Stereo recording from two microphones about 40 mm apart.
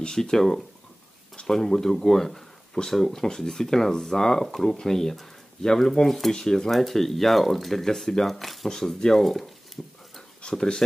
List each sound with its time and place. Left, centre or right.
0.1 s speech: centre
8.6 s speech: centre
9.8 s dog: centre
10.4 s speech: centre